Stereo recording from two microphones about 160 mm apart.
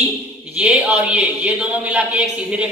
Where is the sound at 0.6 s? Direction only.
5° right (ahead or behind).